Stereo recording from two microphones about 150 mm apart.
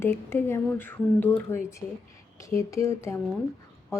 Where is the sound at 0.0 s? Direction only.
15° left (ahead or behind).